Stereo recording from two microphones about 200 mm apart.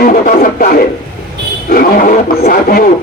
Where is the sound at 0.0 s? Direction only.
45° left (ahead or behind).